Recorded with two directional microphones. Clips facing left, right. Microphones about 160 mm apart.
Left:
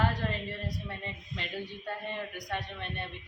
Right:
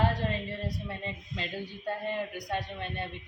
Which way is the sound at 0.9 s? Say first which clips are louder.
Right 3 dB; 25° right (ahead or behind).